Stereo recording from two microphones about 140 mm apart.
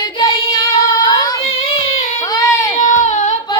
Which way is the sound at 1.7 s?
40° left (ahead or behind).